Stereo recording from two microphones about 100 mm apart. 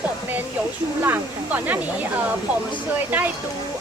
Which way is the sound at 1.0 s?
20° right (ahead or behind).